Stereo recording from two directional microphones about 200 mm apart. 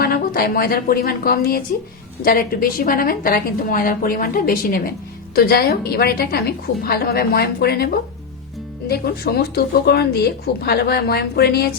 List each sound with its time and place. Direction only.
0.0 s a woman's voice: 50° left (ahead or behind)